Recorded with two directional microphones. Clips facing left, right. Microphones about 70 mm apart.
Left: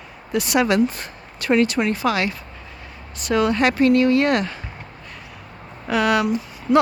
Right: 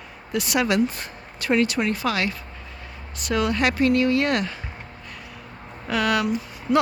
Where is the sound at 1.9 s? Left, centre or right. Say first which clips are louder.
Left 3 dB; left.